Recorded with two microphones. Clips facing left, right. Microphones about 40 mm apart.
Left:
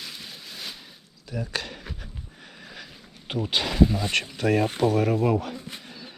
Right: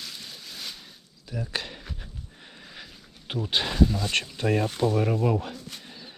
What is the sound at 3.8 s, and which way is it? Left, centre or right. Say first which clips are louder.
Speech: left 3 dB; centre.